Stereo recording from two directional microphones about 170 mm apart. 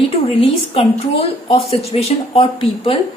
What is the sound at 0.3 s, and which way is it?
A woman's voice, 35° left (ahead or behind).